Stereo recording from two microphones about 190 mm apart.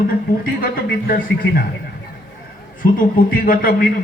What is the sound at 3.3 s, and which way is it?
Speech, 50° left (ahead or behind).